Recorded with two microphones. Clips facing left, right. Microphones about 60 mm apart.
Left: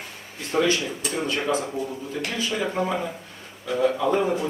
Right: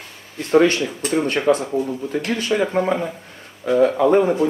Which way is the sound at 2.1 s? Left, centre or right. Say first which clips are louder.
Right 7 dB; right.